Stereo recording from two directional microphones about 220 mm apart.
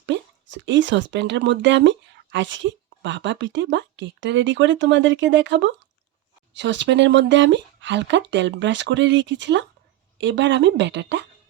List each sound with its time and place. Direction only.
0.0 s speech: 55° right (ahead or behind)